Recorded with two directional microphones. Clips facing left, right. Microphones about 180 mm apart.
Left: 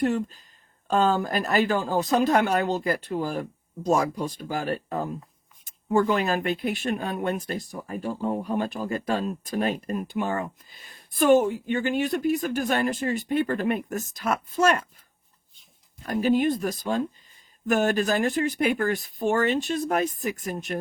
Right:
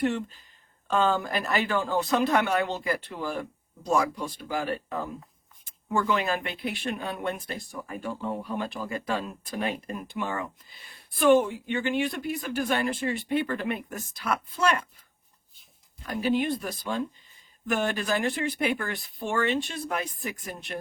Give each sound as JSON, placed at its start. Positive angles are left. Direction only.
{"t": 0.0, "sound": "speech", "side_deg": 40}
{"t": 16.0, "sound": "speech", "side_deg": 45}